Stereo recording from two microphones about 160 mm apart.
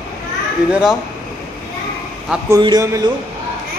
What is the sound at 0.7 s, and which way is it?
Speech, 5° right (ahead or behind).